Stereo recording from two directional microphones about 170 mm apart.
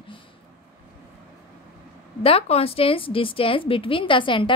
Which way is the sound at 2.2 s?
35° left (ahead or behind).